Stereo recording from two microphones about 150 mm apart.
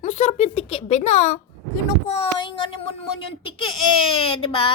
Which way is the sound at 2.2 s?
35° left (ahead or behind).